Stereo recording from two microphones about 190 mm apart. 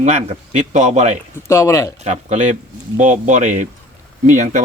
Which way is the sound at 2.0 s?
35° right (ahead or behind).